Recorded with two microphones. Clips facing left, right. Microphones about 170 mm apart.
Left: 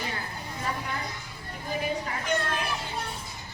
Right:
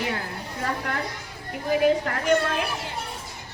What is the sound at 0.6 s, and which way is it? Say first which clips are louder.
A woman's voice: right 5 dB; 70° right (ahead or behind).